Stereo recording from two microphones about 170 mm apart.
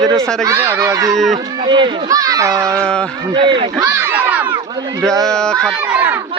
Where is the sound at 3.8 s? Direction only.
10° right (ahead or behind).